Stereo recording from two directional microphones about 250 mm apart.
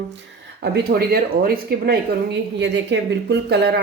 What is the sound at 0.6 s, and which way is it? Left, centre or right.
Speech, right.